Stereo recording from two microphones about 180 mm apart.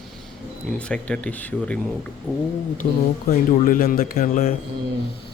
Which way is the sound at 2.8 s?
50° left (ahead or behind).